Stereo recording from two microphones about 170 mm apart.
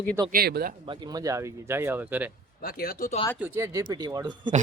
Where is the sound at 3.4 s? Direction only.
15° right (ahead or behind).